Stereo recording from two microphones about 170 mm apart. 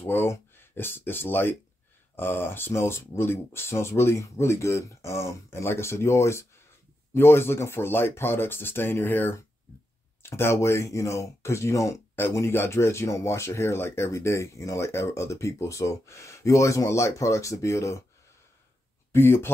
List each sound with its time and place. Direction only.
0.0 s speech: 15° left (ahead or behind)
19.1 s speech: 15° left (ahead or behind)